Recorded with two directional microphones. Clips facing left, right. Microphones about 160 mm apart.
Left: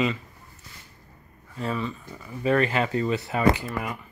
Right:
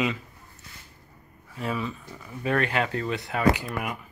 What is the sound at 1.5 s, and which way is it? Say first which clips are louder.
Speech: left 1 dB; 5° right (ahead or behind).